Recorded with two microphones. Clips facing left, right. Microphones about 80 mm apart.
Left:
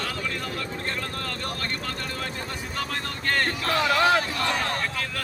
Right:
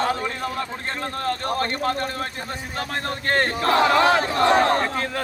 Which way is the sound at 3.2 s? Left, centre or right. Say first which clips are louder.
Right 4 dB; right.